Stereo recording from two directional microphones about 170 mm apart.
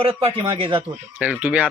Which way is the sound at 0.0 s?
35° right (ahead or behind).